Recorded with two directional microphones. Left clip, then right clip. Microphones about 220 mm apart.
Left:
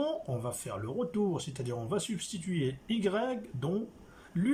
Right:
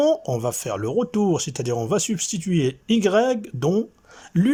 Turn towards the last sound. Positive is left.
turn(degrees=-45)  # may be behind; listen again after turning